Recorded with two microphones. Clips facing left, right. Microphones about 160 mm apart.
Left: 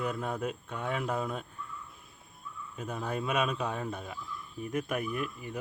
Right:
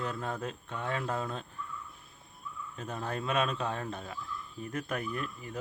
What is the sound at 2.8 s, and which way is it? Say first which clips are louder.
Speech: left 2 dB; 10° left (ahead or behind).